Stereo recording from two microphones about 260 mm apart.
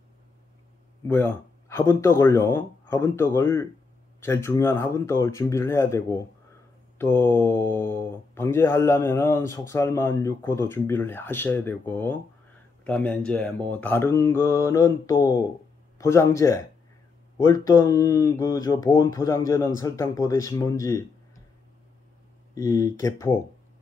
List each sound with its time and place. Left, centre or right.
1.0 s speech: centre
7.0 s mantra: centre
7.7 s speech: centre
22.5 s speech: centre